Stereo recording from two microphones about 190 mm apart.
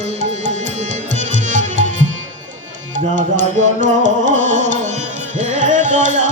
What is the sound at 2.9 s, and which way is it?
Music, 40° right (ahead or behind).